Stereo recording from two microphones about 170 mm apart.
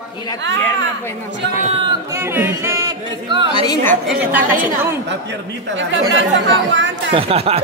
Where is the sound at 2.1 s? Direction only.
15° right (ahead or behind).